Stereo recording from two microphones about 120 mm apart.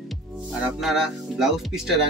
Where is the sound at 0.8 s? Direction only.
5° right (ahead or behind).